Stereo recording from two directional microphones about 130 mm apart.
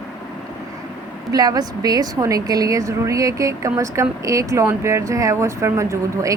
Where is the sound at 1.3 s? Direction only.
30° right (ahead or behind).